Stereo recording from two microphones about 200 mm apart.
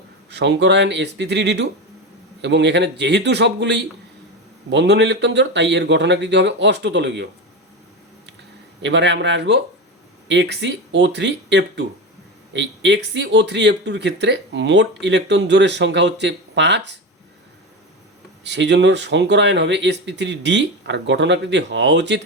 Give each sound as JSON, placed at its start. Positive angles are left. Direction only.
{"t": 0.3, "sound": "speech", "side_deg": -60}
{"t": 8.8, "sound": "speech", "side_deg": -60}
{"t": 18.4, "sound": "speech", "side_deg": -60}